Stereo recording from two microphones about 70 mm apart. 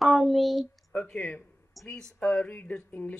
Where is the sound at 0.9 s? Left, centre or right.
Centre.